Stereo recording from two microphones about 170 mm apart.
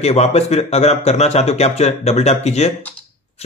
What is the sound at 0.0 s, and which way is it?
Speech, 40° left (ahead or behind).